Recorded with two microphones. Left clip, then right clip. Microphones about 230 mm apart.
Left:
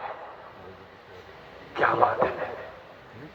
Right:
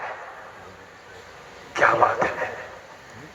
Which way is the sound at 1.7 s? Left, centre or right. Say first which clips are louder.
Right 4 dB; right.